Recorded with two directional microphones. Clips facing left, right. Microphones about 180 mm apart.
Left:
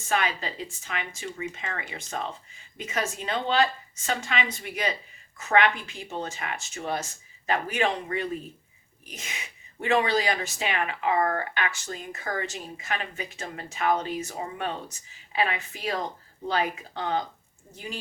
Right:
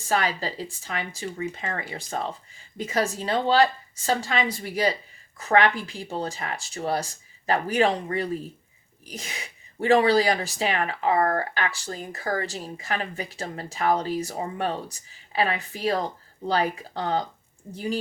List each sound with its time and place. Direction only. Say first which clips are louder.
0.1 s speech: right 2 dB; 35° right (ahead or behind)